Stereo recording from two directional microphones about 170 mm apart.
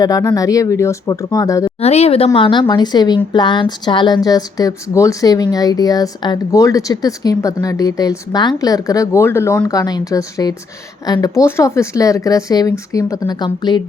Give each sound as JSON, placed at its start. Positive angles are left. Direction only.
{"t": 0.0, "sound": "speech", "side_deg": 20}
{"t": 1.8, "sound": "speech", "side_deg": 40}